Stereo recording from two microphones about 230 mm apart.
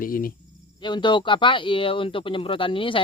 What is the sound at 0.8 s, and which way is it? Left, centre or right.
Speech, centre.